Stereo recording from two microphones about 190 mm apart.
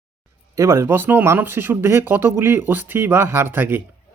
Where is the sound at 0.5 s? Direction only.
15° right (ahead or behind).